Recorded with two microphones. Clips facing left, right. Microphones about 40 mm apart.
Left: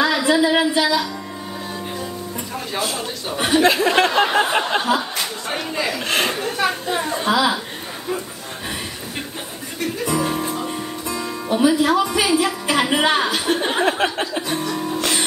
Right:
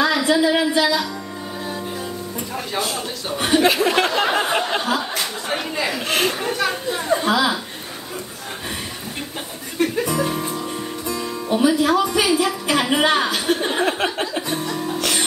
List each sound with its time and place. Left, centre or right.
0.0 s music: centre
2.7 s speech: centre
6.6 s speech: centre
7.2 s speech: centre
10.0 s music: centre
13.7 s a sound: centre
14.7 s music: centre